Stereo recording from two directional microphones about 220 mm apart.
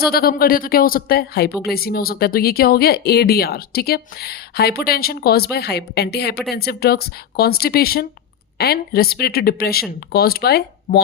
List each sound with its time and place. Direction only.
0.0 s speech: 45° left (ahead or behind)